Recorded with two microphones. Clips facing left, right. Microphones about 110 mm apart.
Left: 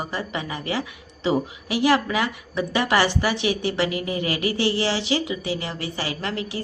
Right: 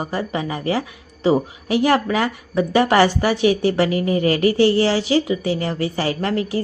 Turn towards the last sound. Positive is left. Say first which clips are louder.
# right 7 dB
turn(degrees=-40)  # may be behind; listen again after turning